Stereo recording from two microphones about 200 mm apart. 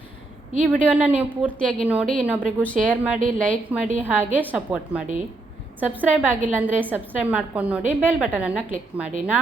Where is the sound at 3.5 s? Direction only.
40° right (ahead or behind).